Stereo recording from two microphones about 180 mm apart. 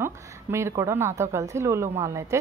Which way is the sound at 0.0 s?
15° right (ahead or behind).